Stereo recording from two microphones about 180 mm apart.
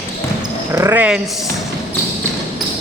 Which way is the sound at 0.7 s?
15° right (ahead or behind).